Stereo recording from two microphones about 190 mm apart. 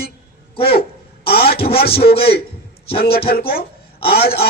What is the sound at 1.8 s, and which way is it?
Speech, 55° left (ahead or behind).